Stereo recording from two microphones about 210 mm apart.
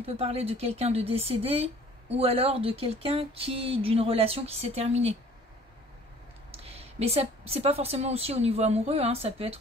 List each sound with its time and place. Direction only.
0.0 s speech: 30° right (ahead or behind)
6.5 s speech: 30° right (ahead or behind)